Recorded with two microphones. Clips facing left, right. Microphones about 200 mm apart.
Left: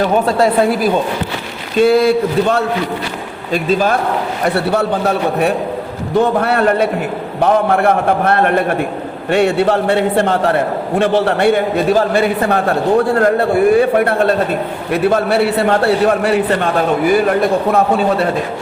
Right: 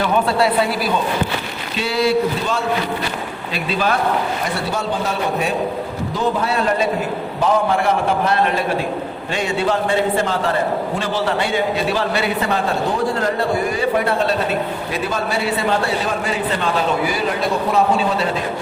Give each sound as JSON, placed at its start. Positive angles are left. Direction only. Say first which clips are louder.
{"t": 0.0, "sound": "a woman's voice", "louder": "left 4 dB", "side_deg": 40}
{"t": 3.5, "sound": "a woman's voice", "louder": "left 7 dB", "side_deg": 45}
{"t": 4.4, "sound": "a man's voice", "louder": "left 7 dB", "side_deg": 60}